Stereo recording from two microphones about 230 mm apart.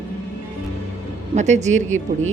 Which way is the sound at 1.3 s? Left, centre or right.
Right.